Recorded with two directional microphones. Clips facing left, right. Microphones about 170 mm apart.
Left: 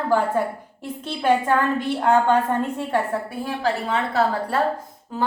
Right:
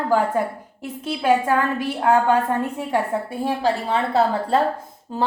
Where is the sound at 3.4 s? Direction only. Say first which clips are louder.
Right 4 dB; 30° right (ahead or behind).